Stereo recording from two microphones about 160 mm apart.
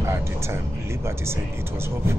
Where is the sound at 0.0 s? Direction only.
15° right (ahead or behind).